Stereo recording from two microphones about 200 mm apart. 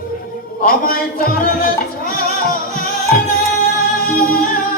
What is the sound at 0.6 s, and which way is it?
Music, 45° left (ahead or behind).